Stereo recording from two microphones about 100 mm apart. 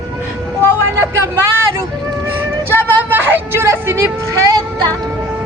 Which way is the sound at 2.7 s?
20° right (ahead or behind).